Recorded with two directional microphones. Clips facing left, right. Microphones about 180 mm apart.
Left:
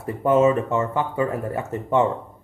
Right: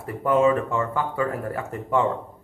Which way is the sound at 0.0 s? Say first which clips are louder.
Left 2 dB; 25° left (ahead or behind).